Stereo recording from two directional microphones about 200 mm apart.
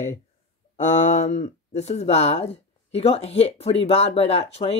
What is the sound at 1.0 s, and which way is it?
Speech, 35° left (ahead or behind).